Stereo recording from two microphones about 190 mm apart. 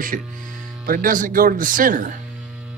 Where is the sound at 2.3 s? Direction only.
5° right (ahead or behind).